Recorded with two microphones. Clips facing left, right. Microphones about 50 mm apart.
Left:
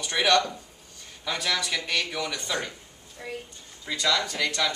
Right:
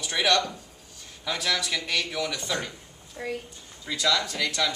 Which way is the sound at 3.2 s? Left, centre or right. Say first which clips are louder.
Right 5 dB; centre.